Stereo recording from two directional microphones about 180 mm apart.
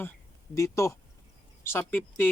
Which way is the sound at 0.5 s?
15° left (ahead or behind).